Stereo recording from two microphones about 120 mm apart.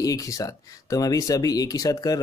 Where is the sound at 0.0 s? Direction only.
30° left (ahead or behind).